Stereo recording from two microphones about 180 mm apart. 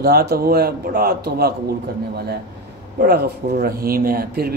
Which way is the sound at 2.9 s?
60° right (ahead or behind).